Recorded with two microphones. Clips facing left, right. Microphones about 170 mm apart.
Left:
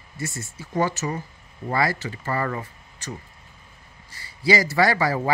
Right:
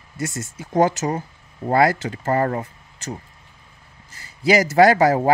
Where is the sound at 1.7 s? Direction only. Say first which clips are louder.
Right 7 dB; 50° right (ahead or behind).